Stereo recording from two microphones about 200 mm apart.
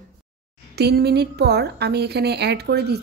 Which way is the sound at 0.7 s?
55° right (ahead or behind).